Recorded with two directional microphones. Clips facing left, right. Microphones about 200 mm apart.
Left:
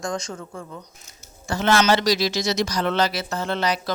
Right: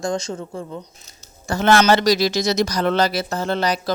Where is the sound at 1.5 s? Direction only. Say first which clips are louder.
Right 4 dB; 50° right (ahead or behind).